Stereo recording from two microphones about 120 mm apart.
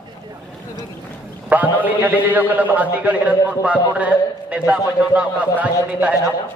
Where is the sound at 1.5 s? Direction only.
15° right (ahead or behind).